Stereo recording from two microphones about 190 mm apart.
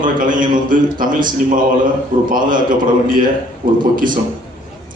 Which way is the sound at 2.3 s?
45° right (ahead or behind).